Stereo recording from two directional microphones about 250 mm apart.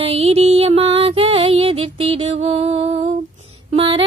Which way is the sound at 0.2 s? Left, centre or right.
Right.